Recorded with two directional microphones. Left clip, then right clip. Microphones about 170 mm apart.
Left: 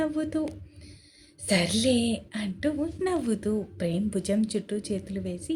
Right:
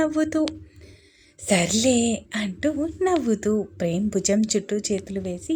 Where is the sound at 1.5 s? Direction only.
30° right (ahead or behind).